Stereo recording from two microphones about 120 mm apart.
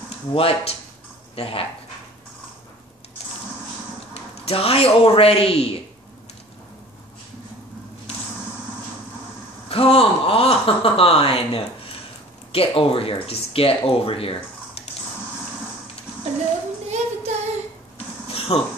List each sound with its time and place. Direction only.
0.3 s speech: 50° left (ahead or behind)
4.1 s speech: 55° left (ahead or behind)
9.7 s speech: 55° left (ahead or behind)
16.9 s child singing: 65° right (ahead or behind)
17.9 s a sound: 55° left (ahead or behind)